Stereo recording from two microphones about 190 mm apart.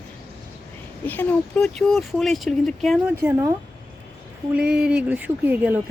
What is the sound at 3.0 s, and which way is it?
Speech, 15° right (ahead or behind).